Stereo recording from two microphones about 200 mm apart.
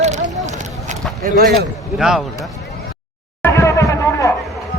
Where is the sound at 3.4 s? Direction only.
15° left (ahead or behind).